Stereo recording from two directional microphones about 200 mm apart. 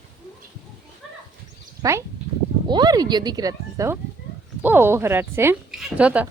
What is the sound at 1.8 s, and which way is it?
A woman's voice, 20° right (ahead or behind).